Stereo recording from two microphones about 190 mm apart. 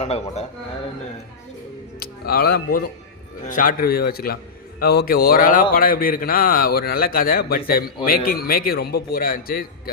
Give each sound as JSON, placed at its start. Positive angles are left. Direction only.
{"t": 0.0, "sound": "speech", "side_deg": 35}
{"t": 2.0, "sound": "a man's voice", "side_deg": 55}